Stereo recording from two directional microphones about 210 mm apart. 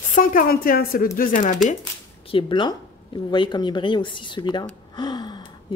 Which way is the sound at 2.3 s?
20° left (ahead or behind).